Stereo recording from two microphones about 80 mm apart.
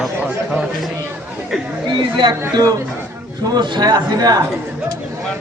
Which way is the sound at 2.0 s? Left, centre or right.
Right.